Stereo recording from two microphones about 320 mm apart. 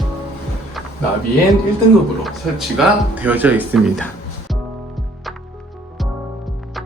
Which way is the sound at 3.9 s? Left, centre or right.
Centre.